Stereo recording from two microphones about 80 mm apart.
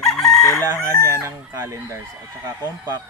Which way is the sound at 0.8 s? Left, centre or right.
Right.